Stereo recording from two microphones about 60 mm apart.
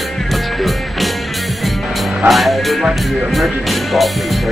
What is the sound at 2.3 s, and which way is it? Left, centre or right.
Speech, centre.